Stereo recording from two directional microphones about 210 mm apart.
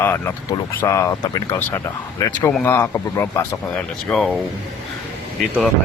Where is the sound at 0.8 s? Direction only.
15° left (ahead or behind).